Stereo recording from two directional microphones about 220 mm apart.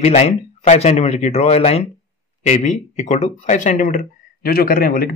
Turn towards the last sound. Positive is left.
turn(degrees=45)  # may be behind; listen again after turning